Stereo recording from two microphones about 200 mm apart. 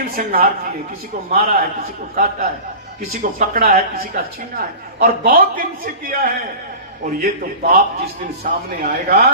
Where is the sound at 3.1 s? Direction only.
45° right (ahead or behind).